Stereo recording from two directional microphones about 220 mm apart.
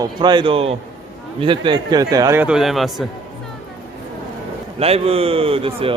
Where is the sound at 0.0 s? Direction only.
20° right (ahead or behind); by 3.1 s centre (ahead or behind).